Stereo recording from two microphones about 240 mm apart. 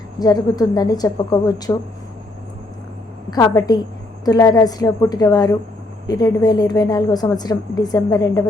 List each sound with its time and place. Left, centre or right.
0.2 s a woman's voice: centre
3.2 s a woman's voice: centre